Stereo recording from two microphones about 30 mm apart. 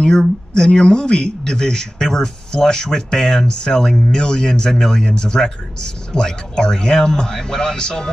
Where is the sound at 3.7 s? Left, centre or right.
Centre.